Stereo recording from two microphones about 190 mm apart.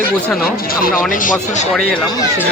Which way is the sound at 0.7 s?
50° left (ahead or behind).